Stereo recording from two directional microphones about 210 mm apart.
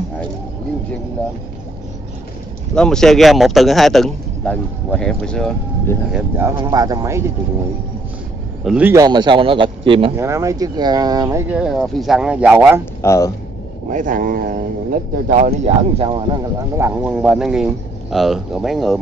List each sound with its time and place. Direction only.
2.7 s speech: 5° left (ahead or behind)
6.3 s speech: 15° right (ahead or behind)
8.6 s speech: 5° right (ahead or behind); by 10.1 s 25° right (ahead or behind)
10.1 s speech: 15° right (ahead or behind)
13.0 s speech: 15° left (ahead or behind)
13.8 s speech: 40° right (ahead or behind)
16.7 s speech: 10° right (ahead or behind)